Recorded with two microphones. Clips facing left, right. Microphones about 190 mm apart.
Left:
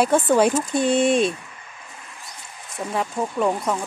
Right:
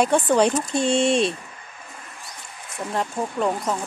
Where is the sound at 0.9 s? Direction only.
55° left (ahead or behind).